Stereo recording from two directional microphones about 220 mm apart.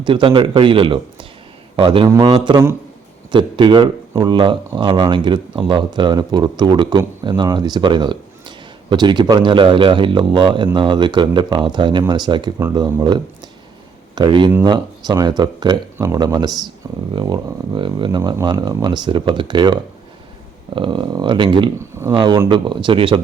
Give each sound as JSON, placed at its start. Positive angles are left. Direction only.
{"t": 0.0, "sound": "a man's voice", "side_deg": -20}